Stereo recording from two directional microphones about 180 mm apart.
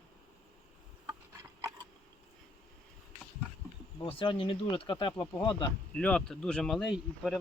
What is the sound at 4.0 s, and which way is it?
Speech, 30° left (ahead or behind).